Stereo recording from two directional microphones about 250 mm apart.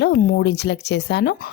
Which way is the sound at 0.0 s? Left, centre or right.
Left.